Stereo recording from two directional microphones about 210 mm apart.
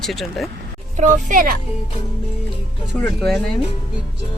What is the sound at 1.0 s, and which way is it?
Speech, 40° right (ahead or behind).